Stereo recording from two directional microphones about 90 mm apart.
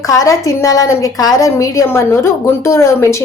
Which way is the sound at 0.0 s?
35° left (ahead or behind).